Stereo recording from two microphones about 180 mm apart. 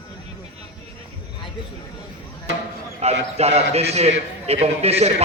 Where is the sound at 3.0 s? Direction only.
35° right (ahead or behind).